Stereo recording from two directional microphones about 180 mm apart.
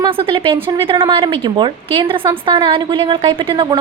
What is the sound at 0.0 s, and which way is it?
A woman's voice, 30° right (ahead or behind).